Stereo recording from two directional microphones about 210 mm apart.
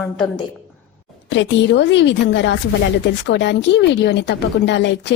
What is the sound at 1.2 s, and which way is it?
Speech, 55° left (ahead or behind).